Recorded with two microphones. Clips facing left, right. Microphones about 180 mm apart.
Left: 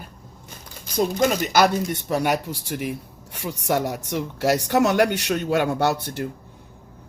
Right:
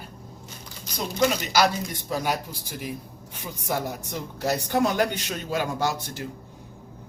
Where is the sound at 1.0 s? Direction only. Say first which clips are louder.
Left 4 dB; 50° left (ahead or behind).